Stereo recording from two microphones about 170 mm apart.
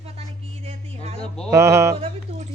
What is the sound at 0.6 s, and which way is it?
Music, 40° right (ahead or behind).